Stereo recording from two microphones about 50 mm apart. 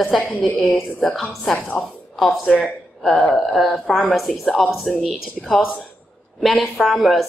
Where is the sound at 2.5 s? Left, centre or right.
Centre.